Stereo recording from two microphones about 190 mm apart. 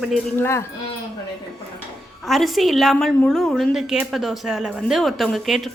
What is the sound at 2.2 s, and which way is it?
A woman's voice, centre (ahead or behind).